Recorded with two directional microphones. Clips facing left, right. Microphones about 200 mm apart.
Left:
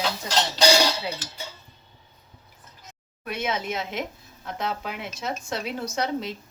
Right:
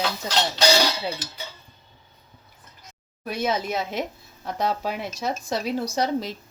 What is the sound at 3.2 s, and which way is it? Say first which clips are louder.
Speech: right 3 dB; 35° right (ahead or behind).